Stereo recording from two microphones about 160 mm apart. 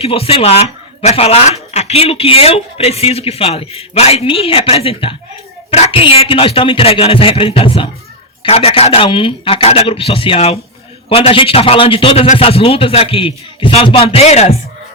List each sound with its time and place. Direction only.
0.0 s speech: 35° left (ahead or behind)